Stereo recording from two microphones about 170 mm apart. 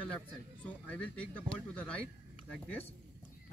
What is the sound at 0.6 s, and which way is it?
Speech, 10° left (ahead or behind).